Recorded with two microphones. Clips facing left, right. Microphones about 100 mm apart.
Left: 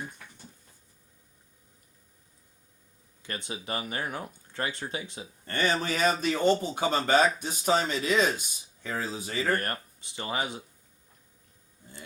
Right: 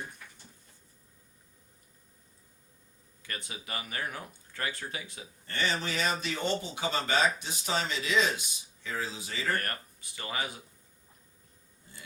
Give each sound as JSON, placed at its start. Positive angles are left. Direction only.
{"t": 3.2, "sound": "speech", "side_deg": 25}
{"t": 5.5, "sound": "speech", "side_deg": 50}
{"t": 9.6, "sound": "speech", "side_deg": 25}